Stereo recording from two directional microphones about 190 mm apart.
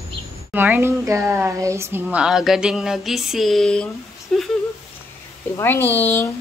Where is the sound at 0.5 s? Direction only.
10° right (ahead or behind).